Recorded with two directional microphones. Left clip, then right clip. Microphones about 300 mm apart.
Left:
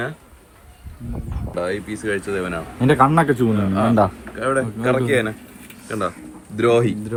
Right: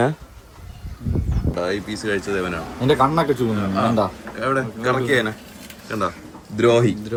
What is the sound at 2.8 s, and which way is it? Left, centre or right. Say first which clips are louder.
Speech: left 2 dB; left.